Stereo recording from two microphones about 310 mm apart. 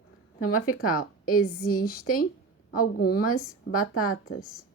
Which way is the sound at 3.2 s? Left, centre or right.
Left.